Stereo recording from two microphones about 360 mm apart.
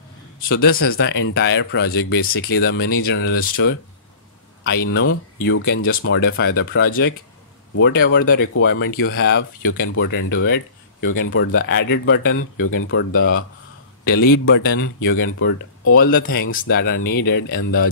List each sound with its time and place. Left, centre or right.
0.4 s speech: left
4.8 s speech: left